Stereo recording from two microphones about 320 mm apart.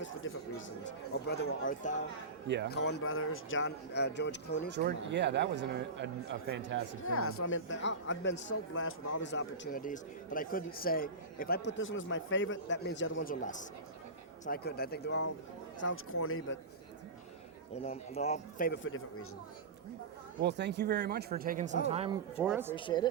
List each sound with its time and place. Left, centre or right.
1.3 s speech: left
4.7 s speech: right
7.1 s speech: left
17.8 s speech: centre; by 19.0 s left
20.4 s speech: right
22.4 s speech: centre
22.7 s speech: centre